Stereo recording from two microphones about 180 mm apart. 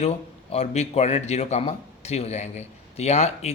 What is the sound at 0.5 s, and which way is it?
A man's voice, 40° left (ahead or behind).